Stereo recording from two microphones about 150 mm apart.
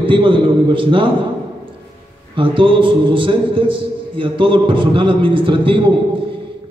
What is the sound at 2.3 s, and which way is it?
A man's voice, 35° right (ahead or behind).